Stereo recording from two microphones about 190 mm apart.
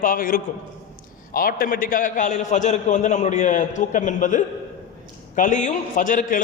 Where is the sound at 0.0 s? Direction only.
45° left (ahead or behind).